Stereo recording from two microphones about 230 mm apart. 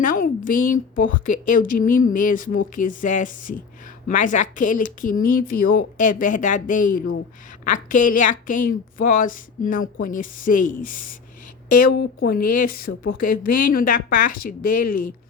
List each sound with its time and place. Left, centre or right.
0.0 s a woman's voice: left